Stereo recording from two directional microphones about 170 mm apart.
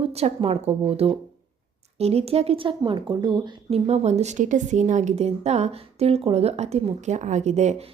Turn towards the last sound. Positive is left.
turn(degrees=-40)  # may be behind; listen again after turning